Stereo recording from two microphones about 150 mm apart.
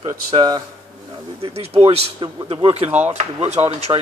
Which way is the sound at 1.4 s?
40° right (ahead or behind).